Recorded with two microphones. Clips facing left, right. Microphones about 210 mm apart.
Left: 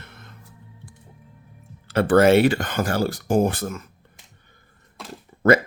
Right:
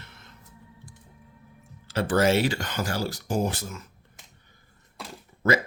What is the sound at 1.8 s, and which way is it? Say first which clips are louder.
Speech: left 7 dB; 60° left (ahead or behind).